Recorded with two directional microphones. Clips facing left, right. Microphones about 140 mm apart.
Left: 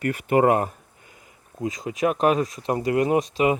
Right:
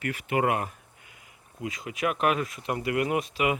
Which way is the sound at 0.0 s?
45° left (ahead or behind).